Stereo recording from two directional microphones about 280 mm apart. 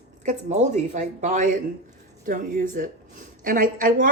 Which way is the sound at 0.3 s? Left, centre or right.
Right.